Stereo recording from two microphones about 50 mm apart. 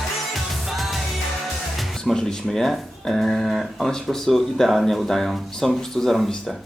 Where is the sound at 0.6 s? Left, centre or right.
Centre.